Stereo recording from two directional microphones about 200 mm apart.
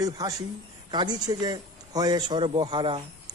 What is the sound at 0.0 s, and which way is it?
A man's voice, 20° right (ahead or behind).